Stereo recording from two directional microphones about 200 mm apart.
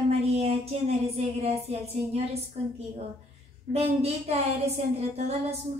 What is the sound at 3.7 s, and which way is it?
Speech, 30° right (ahead or behind).